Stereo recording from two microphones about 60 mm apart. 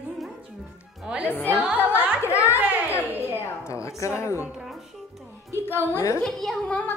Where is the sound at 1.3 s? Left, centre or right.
Left.